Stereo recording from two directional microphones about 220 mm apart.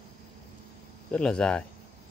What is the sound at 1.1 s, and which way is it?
Speech, 5° left (ahead or behind).